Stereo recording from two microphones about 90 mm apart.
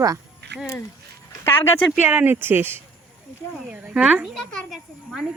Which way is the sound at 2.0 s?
20° right (ahead or behind).